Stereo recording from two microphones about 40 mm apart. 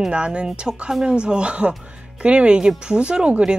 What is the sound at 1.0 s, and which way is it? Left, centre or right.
Speech, right.